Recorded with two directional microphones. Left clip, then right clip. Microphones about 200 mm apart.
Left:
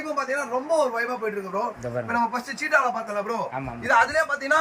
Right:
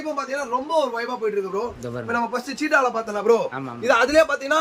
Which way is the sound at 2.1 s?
25° right (ahead or behind).